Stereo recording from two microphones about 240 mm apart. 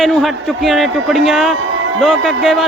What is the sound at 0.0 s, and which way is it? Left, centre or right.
Speech, centre.